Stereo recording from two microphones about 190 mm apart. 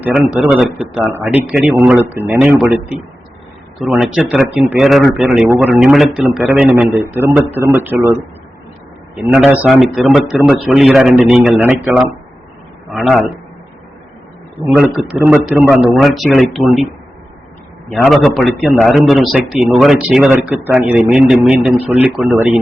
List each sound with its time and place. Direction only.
0.0 s a man's voice: 5° right (ahead or behind)
3.8 s a man's voice: centre (ahead or behind)
9.1 s speech: 5° right (ahead or behind)
12.9 s speech: centre (ahead or behind)
14.7 s a man's voice: 5° right (ahead or behind)
17.9 s speech: centre (ahead or behind)